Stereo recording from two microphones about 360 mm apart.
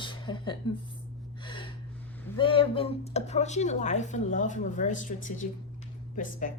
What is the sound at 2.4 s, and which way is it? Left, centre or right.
A woman's voice, centre.